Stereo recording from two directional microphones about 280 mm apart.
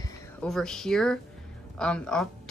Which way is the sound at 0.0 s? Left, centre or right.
Centre.